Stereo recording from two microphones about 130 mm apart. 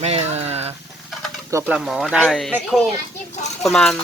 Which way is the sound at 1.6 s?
5° right (ahead or behind).